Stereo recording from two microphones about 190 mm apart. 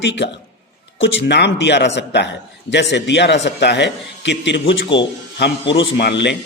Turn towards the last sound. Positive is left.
turn(degrees=65)  # may be behind; listen again after turning